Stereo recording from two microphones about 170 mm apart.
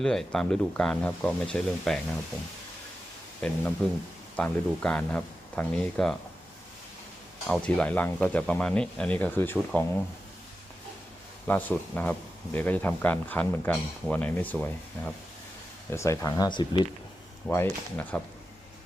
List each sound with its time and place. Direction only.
0.0 s speech: 5° left (ahead or behind)
3.4 s speech: 10° left (ahead or behind)
7.4 s speech: 5° left (ahead or behind)
11.4 s speech: 10° left (ahead or behind); by 16.8 s 25° left (ahead or behind)
17.5 s speech: 10° left (ahead or behind)